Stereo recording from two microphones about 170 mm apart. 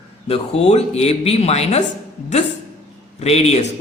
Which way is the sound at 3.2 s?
40° left (ahead or behind).